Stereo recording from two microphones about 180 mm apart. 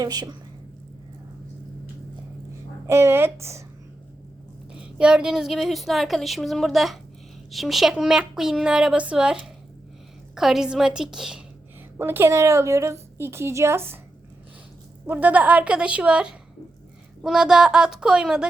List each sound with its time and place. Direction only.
0.0 s a woman's voice: 20° right (ahead or behind)
2.8 s a woman's voice: 15° right (ahead or behind)
4.8 s a woman's voice: 5° right (ahead or behind)
15.0 s a woman's voice: 10° right (ahead or behind)